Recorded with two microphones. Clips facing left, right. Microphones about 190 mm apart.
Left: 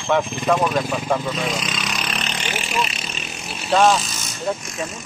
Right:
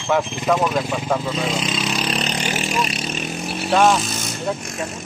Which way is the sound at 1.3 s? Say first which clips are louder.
Right 2 dB; 25° right (ahead or behind).